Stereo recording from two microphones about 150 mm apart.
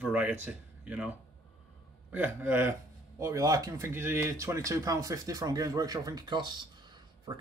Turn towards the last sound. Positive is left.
turn(degrees=-30)  # may be behind; listen again after turning